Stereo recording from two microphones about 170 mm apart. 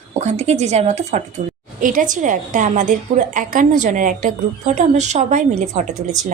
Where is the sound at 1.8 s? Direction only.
50° right (ahead or behind).